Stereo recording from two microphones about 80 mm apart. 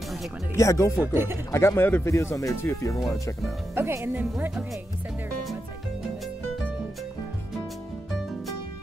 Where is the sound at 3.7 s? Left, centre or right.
Right.